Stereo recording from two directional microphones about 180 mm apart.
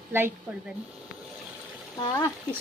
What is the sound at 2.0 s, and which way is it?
Speech, 25° left (ahead or behind).